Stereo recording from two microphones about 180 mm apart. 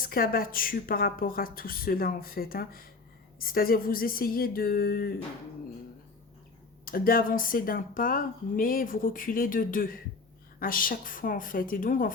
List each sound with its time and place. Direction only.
0.0 s speech: 55° left (ahead or behind)
6.8 s speech: 55° left (ahead or behind)